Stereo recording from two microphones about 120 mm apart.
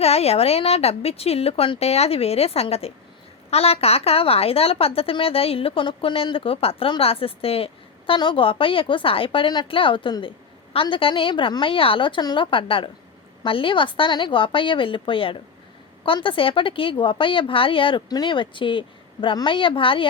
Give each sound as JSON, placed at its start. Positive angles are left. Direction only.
{"t": 0.0, "sound": "a woman's voice", "side_deg": 60}